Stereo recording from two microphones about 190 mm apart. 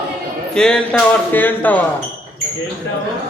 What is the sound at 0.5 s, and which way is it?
Speech, 5° left (ahead or behind).